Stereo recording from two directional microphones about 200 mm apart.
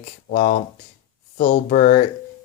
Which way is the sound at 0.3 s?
45° left (ahead or behind).